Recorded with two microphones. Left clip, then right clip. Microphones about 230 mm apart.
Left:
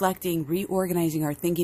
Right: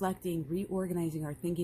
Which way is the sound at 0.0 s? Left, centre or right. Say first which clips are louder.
Left 9 dB; left.